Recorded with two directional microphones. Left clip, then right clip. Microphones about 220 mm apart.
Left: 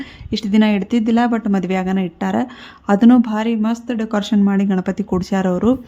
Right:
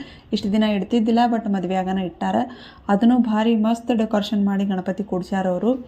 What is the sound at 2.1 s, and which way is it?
Speech, 20° left (ahead or behind).